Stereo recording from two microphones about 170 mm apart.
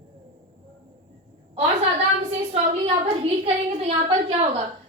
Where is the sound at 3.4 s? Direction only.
35° right (ahead or behind).